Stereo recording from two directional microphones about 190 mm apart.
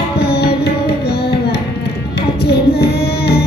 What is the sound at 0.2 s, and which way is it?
Music, 55° left (ahead or behind).